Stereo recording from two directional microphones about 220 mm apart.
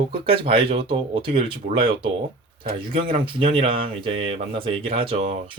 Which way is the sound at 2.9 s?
25° right (ahead or behind).